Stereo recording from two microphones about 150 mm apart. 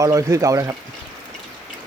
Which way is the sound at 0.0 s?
20° right (ahead or behind).